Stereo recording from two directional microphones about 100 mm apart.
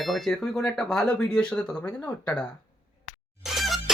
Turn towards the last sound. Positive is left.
turn(degrees=0)  # may be behind; listen again after turning